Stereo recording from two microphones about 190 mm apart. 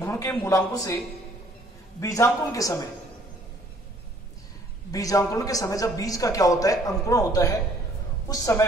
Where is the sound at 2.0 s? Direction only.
15° left (ahead or behind).